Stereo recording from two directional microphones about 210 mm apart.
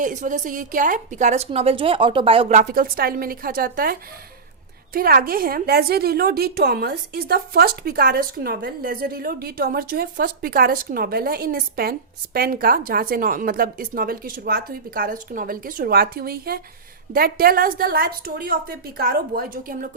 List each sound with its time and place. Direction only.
0.0 s a woman's voice: 35° right (ahead or behind)
4.9 s a woman's voice: 45° right (ahead or behind)